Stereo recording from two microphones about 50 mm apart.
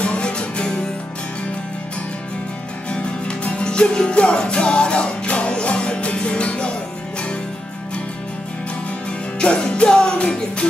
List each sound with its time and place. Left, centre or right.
0.0 s music: left
3.6 s music: centre
9.4 s music: left